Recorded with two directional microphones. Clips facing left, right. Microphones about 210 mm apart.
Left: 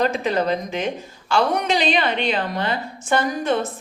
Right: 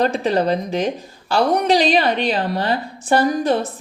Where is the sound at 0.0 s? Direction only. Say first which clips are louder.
Right 3 dB; 35° right (ahead or behind).